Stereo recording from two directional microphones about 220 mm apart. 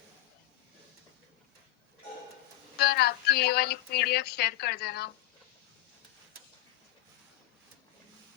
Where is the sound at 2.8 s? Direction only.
45° left (ahead or behind).